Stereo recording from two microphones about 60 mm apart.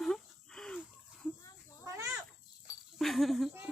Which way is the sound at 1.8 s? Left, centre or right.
Right.